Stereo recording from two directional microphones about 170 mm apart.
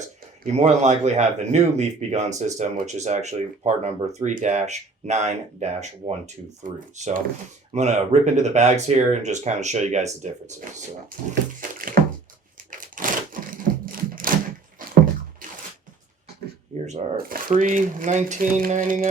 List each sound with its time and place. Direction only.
0.5 s a man's voice: 40° right (ahead or behind)
12.7 s a sound: 50° right (ahead or behind)
16.8 s speech: 50° right (ahead or behind)